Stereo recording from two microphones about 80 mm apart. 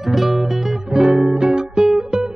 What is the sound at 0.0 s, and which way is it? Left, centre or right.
Music, centre.